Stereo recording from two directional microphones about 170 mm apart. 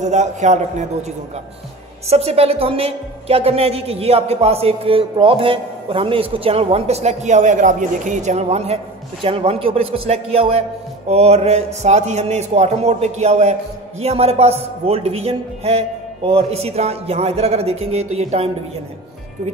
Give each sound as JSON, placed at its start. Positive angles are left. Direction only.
{"t": 0.0, "sound": "a man's voice", "side_deg": -45}
{"t": 2.0, "sound": "a man's voice", "side_deg": -35}